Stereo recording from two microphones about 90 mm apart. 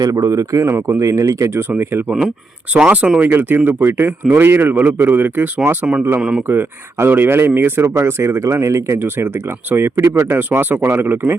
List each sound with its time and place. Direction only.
0.0 s speech: 40° right (ahead or behind); by 6.4 s 5° right (ahead or behind)
6.5 s speech: 25° right (ahead or behind)